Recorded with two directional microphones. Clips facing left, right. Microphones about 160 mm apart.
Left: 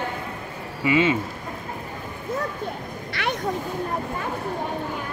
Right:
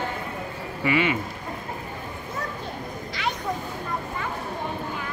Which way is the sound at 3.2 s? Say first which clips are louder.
Left 2 dB; 65° left (ahead or behind).